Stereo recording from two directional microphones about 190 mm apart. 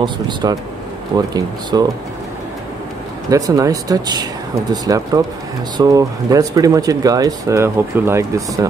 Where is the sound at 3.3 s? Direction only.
20° right (ahead or behind).